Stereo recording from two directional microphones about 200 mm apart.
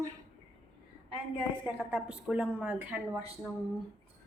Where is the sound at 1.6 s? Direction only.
5° right (ahead or behind).